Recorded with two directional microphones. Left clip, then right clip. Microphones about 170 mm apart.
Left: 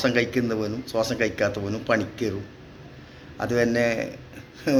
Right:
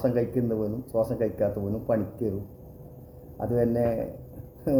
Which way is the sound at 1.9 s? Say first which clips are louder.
Left 4 dB; 5° left (ahead or behind).